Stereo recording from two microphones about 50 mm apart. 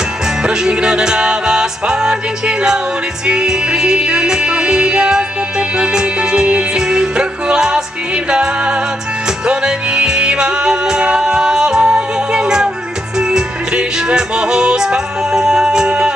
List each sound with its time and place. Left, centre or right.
0.4 s music: centre